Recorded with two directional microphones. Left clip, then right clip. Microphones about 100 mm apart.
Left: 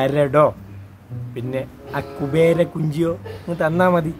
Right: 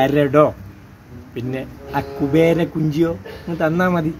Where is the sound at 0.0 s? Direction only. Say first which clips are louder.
Right 1 dB; 25° left (ahead or behind).